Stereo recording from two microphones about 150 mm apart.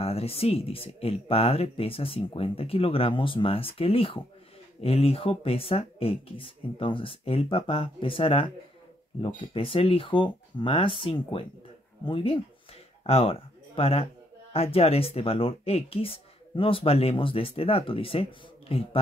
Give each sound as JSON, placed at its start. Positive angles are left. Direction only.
{"t": 0.0, "sound": "speech", "side_deg": 40}